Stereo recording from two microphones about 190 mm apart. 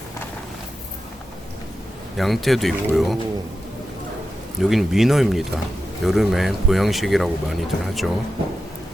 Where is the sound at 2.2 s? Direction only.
Centre (ahead or behind).